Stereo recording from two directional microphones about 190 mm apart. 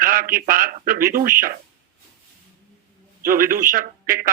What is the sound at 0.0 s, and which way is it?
A man's voice, 50° right (ahead or behind).